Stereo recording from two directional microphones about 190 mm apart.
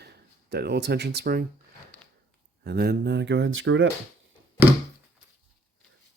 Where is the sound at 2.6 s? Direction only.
55° right (ahead or behind); by 3.9 s 85° right.